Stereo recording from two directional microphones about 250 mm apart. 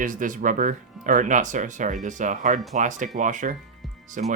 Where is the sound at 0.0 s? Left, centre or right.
Right.